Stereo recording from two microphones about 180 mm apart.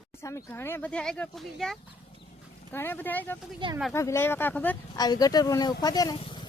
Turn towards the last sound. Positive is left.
turn(degrees=30)  # may be behind; listen again after turning